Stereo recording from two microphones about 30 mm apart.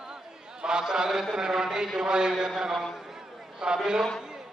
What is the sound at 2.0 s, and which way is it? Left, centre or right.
Speech, right.